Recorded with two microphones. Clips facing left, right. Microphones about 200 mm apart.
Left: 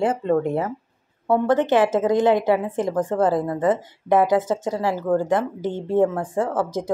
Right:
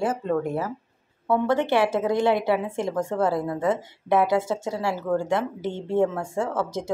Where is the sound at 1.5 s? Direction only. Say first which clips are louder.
Left 4 dB; 50° left (ahead or behind).